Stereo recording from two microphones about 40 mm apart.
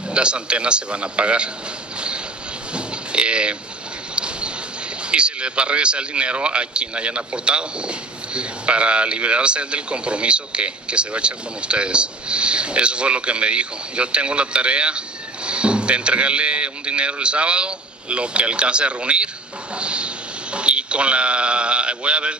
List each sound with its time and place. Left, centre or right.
0.1 s a man's voice: right
2.0 s vehicle: right
2.7 s a sound: right
5.0 s a man's voice: right